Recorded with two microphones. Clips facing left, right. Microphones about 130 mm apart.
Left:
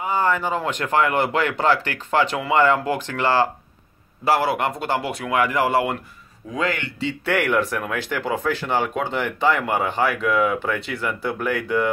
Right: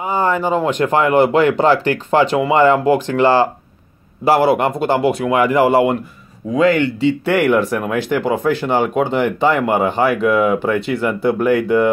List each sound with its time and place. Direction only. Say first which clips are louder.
0.0 s speech: right 4 dB; 25° right (ahead or behind)